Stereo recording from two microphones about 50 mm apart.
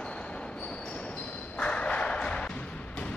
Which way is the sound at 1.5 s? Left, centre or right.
Left.